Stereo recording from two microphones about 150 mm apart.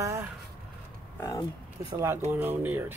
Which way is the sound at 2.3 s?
10° right (ahead or behind).